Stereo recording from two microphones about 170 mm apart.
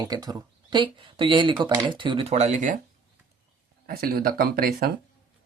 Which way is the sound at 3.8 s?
65° right (ahead or behind).